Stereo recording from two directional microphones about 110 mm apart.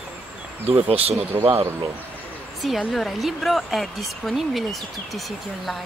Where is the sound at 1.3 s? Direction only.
20° right (ahead or behind).